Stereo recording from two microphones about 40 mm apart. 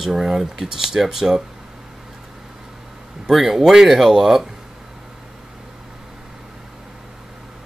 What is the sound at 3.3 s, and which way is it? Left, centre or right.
Speech, centre.